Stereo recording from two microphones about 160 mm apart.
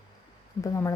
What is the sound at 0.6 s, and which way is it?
Speech, 20° left (ahead or behind).